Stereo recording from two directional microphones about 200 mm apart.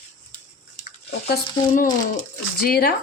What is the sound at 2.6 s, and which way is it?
Speech, 50° left (ahead or behind).